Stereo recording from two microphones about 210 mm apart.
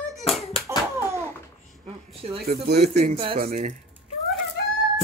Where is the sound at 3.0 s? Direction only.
25° right (ahead or behind).